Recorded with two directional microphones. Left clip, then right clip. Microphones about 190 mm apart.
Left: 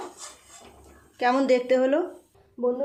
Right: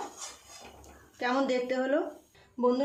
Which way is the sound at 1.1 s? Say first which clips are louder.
Left 7 dB; 35° left (ahead or behind).